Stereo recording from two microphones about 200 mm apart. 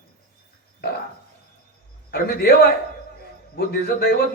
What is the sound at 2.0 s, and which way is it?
A man's voice, 50° left (ahead or behind).